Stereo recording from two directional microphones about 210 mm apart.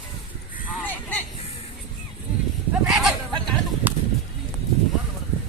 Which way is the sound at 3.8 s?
10° right (ahead or behind).